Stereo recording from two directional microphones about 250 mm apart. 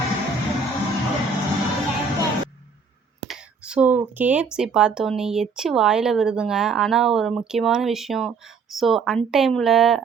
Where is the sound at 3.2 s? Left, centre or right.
Centre.